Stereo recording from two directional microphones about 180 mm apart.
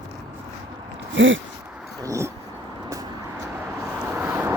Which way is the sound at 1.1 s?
90° right.